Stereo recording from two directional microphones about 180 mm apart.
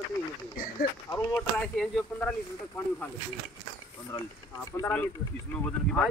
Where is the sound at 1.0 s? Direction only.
10° left (ahead or behind).